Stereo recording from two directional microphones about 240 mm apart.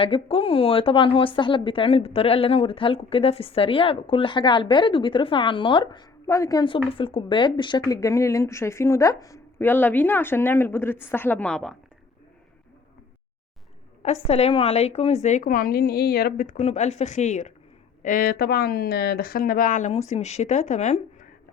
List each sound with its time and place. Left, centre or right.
0.0 s speech: left; by 11.8 s centre
14.0 s speech: left